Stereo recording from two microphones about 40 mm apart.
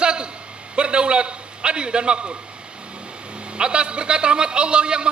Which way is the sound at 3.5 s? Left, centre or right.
Right.